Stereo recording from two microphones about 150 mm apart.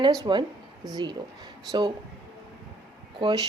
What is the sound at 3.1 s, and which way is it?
Speech, 30° right (ahead or behind).